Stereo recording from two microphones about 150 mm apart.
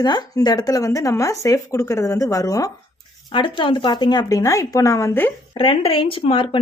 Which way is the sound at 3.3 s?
35° left (ahead or behind).